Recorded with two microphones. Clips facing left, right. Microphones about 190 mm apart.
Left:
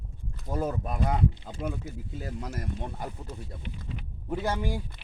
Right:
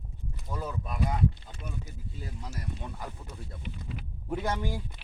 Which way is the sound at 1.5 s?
75° left (ahead or behind).